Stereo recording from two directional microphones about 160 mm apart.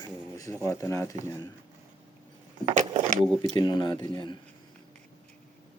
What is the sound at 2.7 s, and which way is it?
Keys jangling, 45° right (ahead or behind).